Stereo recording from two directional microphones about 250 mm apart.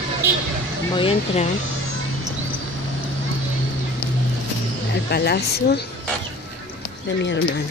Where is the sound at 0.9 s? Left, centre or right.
Left.